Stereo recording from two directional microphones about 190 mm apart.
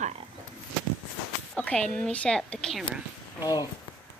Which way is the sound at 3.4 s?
20° left (ahead or behind).